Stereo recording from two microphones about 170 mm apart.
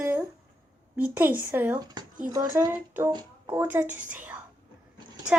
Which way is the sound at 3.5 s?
10° right (ahead or behind).